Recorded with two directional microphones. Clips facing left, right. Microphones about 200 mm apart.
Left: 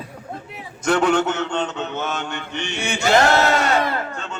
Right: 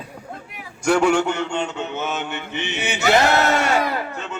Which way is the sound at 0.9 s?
10° right (ahead or behind).